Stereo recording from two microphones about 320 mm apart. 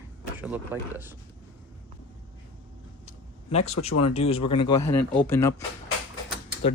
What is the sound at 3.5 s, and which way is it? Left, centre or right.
Speech, centre.